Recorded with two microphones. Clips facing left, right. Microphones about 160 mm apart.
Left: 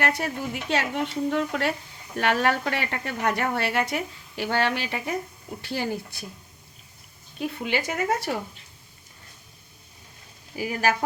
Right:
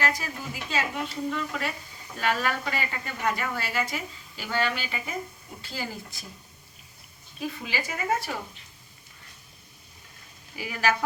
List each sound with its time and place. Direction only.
0.0 s a woman's voice: 65° left (ahead or behind)
7.3 s a woman's voice: 65° left (ahead or behind)
10.5 s speech: 45° left (ahead or behind)